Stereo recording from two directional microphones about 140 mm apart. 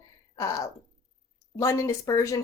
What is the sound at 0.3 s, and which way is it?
A woman's voice, 20° left (ahead or behind).